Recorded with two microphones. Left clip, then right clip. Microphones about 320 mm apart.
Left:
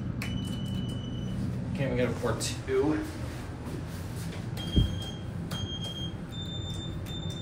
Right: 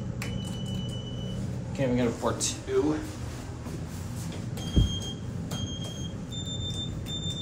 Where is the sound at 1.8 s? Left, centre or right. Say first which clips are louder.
Right 2 dB; centre.